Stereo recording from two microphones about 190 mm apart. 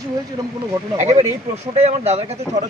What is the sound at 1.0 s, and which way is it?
Speech, 35° right (ahead or behind).